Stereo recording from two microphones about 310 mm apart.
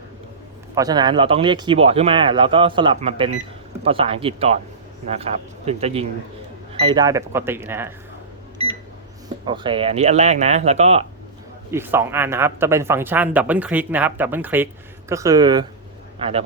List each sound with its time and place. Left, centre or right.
0.8 s speech: centre
9.5 s speech: centre
11.7 s speech: centre